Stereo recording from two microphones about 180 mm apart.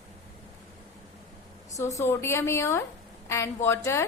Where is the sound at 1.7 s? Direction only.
15° left (ahead or behind).